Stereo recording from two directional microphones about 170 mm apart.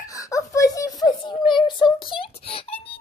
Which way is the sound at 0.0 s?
20° left (ahead or behind).